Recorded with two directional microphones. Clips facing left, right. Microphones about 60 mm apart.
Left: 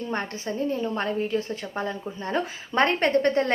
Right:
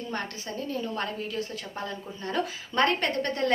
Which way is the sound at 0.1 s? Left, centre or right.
Left.